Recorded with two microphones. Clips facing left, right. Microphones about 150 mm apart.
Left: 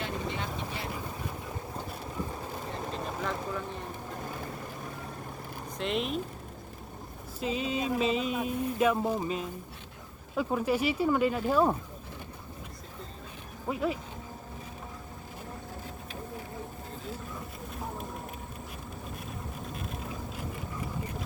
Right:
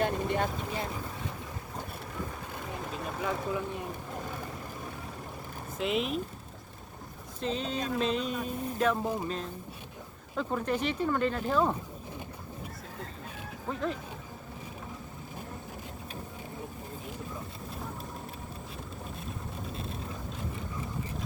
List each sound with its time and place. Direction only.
0.0 s vehicle: 50° right (ahead or behind)
5.8 s speech: centre (ahead or behind)
7.3 s speech: 5° left (ahead or behind)
9.0 s speech: 20° left (ahead or behind)
10.3 s speech: 10° left (ahead or behind)
13.7 s speech: 10° left (ahead or behind)